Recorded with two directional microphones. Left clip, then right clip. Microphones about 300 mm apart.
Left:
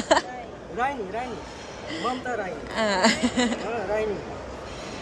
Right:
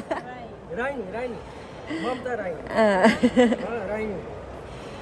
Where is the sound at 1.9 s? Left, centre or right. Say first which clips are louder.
Even; centre.